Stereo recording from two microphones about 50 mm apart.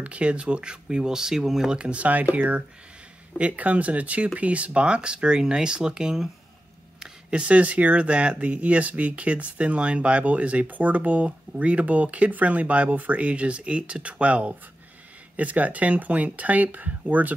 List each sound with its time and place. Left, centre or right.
0.0 s speech: right
1.8 s speech: right
7.0 s a sound: centre
7.4 s speech: right